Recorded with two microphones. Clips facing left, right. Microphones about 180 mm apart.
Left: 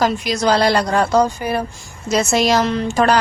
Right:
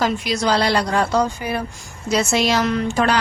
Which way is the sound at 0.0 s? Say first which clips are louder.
Left 3 dB; 45° left (ahead or behind).